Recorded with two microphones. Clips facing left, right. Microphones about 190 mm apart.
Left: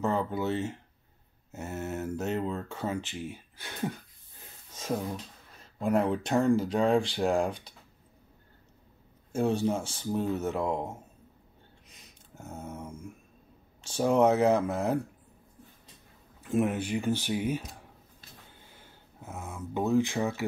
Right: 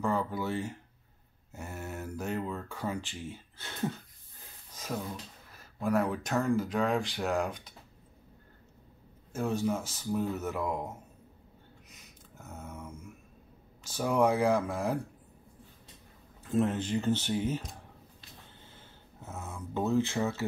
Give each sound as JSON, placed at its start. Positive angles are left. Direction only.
{"t": 0.0, "sound": "speech", "side_deg": 20}
{"t": 5.8, "sound": "speech", "side_deg": 25}
{"t": 9.3, "sound": "speech", "side_deg": 30}
{"t": 12.4, "sound": "a sound", "side_deg": 25}
{"t": 13.8, "sound": "speech", "side_deg": 25}
{"t": 16.4, "sound": "speech", "side_deg": 15}
{"t": 18.7, "sound": "a sound", "side_deg": 15}